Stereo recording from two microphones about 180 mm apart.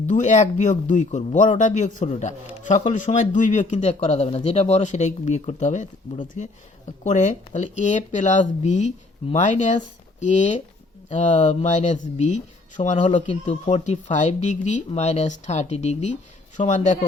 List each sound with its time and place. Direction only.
0.1 s speech: 45° left (ahead or behind)
11.1 s speech: 45° left (ahead or behind)